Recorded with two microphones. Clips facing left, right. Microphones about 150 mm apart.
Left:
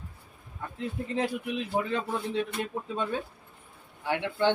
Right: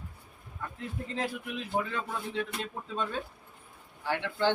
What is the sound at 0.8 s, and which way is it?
A man's voice, 20° left (ahead or behind).